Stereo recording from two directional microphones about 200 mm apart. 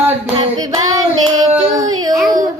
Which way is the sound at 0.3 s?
20° right (ahead or behind).